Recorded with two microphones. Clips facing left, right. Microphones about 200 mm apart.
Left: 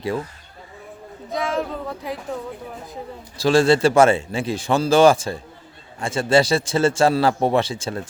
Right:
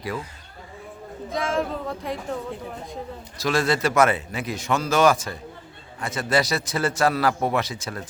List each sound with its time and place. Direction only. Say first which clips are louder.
1.3 s speech: left 1 dB; centre (ahead or behind)
3.3 s a man's voice: left 7 dB; 30° left (ahead or behind)